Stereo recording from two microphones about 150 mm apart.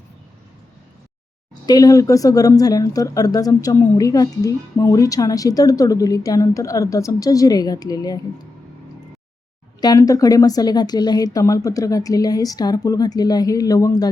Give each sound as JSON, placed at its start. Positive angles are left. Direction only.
{"t": 1.6, "sound": "a woman's voice", "side_deg": 25}
{"t": 9.8, "sound": "a woman's voice", "side_deg": 25}